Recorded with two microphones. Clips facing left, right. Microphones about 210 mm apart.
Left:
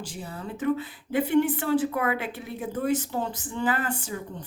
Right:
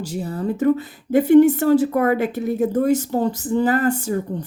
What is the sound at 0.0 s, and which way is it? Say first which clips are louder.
Speech: right 11 dB; 40° right (ahead or behind).